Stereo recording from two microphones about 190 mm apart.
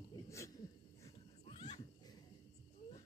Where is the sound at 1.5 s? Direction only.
30° left (ahead or behind).